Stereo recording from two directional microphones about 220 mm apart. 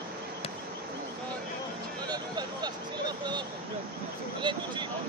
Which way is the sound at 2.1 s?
20° right (ahead or behind).